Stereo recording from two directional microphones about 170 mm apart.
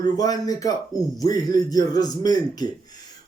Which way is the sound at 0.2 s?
20° left (ahead or behind).